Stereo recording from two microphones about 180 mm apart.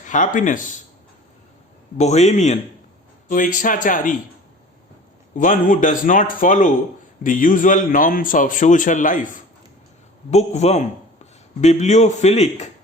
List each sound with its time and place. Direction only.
0.0 s a man's voice: 45° left (ahead or behind)
2.0 s a man's voice: 40° left (ahead or behind)
5.4 s a man's voice: 50° left (ahead or behind)